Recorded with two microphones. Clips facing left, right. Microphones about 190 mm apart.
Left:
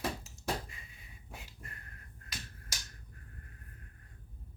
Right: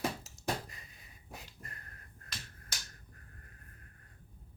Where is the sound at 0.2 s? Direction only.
40° right (ahead or behind).